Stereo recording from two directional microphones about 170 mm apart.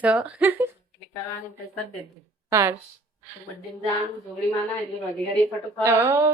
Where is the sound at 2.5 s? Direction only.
15° right (ahead or behind).